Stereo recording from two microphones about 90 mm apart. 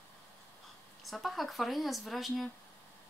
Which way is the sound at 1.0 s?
Centre (ahead or behind).